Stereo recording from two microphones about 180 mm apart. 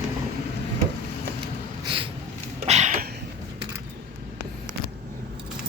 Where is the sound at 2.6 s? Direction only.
40° right (ahead or behind).